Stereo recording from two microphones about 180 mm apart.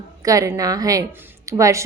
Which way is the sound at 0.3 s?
20° right (ahead or behind).